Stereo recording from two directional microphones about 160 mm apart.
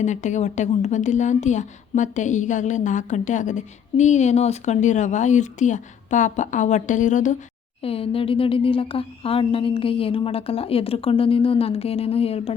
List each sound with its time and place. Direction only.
0.0 s a woman's voice: 50° left (ahead or behind)
7.8 s speech: 35° left (ahead or behind)